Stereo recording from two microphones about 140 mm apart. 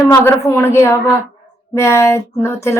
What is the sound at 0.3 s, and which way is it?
A woman's voice, 20° left (ahead or behind).